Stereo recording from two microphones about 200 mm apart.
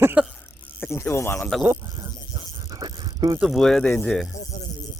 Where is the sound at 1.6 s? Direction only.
15° right (ahead or behind).